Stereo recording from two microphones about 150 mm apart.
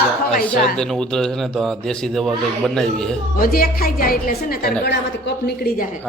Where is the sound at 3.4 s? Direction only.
75° left (ahead or behind).